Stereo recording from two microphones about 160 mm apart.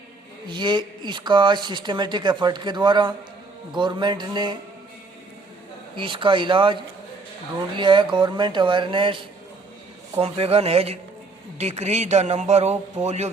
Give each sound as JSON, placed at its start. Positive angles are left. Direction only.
{"t": 0.4, "sound": "speech", "side_deg": -30}
{"t": 6.0, "sound": "speech", "side_deg": -30}